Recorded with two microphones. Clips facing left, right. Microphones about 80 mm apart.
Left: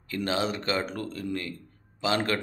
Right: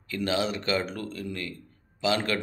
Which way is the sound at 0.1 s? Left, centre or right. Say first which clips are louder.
Right 1 dB; left.